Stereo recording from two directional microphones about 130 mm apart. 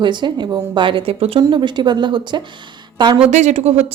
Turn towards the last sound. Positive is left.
turn(degrees=-55)  # may be behind; listen again after turning